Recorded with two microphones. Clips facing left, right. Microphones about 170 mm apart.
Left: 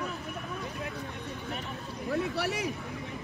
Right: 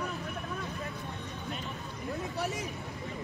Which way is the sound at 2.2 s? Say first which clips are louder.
Left 3 dB; 70° left (ahead or behind).